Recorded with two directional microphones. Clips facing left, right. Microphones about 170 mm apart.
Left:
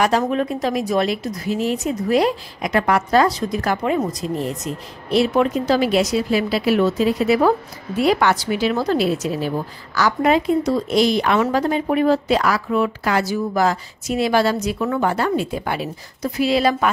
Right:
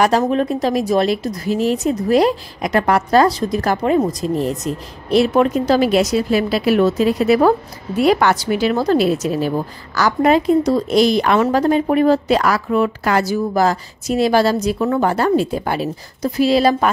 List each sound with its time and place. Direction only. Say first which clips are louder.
0.2 s a woman's voice: right 3 dB; 35° right (ahead or behind)